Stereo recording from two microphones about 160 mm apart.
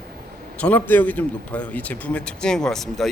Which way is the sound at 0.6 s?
10° left (ahead or behind).